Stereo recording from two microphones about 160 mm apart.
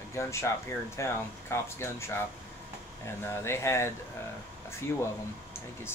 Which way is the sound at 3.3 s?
15° left (ahead or behind).